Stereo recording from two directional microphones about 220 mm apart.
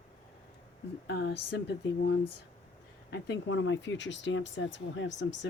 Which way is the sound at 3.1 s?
55° left (ahead or behind).